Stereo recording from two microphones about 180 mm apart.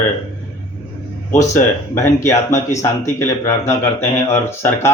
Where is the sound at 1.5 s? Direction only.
15° left (ahead or behind).